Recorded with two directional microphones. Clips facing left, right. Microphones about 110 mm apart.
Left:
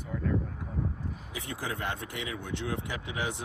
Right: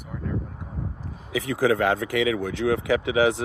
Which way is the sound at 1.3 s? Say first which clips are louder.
Right 16 dB; 90° right.